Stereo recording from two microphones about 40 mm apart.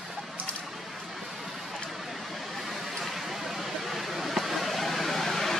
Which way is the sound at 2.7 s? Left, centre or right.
Centre.